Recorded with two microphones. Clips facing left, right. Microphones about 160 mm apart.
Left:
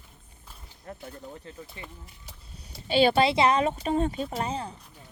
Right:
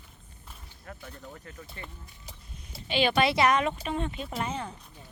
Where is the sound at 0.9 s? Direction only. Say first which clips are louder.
Left 4 dB; 30° left (ahead or behind).